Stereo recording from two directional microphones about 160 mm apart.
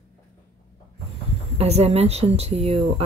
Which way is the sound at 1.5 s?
40° right (ahead or behind).